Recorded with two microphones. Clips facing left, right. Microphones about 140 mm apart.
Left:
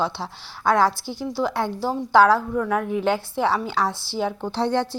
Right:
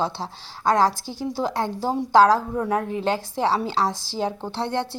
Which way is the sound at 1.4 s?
40° right (ahead or behind).